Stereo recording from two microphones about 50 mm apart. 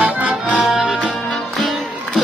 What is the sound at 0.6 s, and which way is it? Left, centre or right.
Music, centre.